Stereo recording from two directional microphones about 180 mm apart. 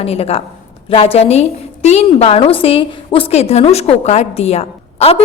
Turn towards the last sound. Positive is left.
turn(degrees=35)  # may be behind; listen again after turning